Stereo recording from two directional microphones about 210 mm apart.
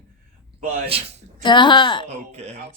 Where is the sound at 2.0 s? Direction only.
30° right (ahead or behind).